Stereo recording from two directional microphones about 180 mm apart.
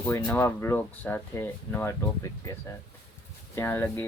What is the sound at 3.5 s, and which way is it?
Speech, 15° left (ahead or behind).